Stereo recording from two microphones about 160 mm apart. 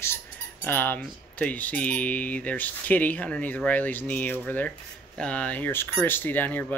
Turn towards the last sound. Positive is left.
turn(degrees=10)  # may be behind; listen again after turning